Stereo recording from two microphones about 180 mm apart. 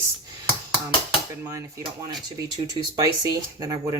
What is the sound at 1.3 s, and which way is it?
Speech, 15° right (ahead or behind).